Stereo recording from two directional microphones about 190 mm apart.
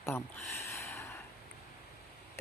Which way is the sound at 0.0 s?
10° left (ahead or behind).